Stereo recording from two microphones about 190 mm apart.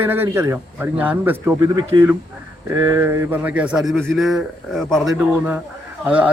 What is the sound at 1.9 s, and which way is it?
Speech, 25° right (ahead or behind).